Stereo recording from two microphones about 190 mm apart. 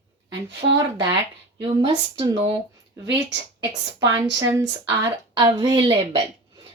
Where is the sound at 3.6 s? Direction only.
20° right (ahead or behind).